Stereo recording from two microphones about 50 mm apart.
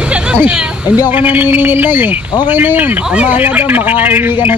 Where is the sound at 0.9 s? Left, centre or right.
Right.